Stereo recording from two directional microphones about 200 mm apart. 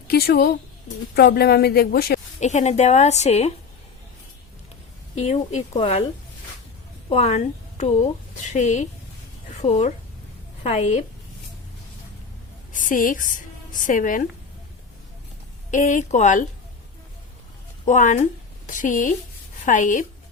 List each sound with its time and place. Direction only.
0.1 s speech: 50° left (ahead or behind)
2.4 s a woman's voice: 35° left (ahead or behind)
5.1 s a woman's voice: 35° left (ahead or behind)
7.1 s a woman's voice: 35° left (ahead or behind)
12.7 s speech: 40° left (ahead or behind)
15.7 s a woman's voice: 40° left (ahead or behind)
17.8 s a woman's voice: 40° left (ahead or behind)